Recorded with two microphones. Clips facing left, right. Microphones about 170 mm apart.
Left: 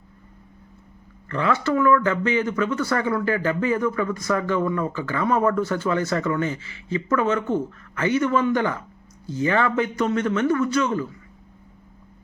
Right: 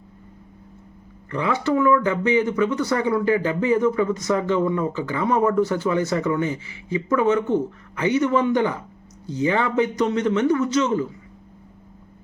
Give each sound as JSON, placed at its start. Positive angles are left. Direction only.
{"t": 1.3, "sound": "a man's voice", "side_deg": -15}